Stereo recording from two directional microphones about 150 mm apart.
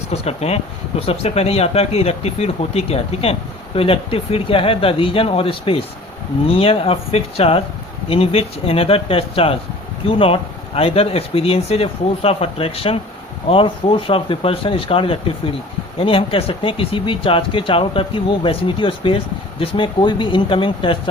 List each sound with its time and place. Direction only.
0.1 s speech: 45° left (ahead or behind)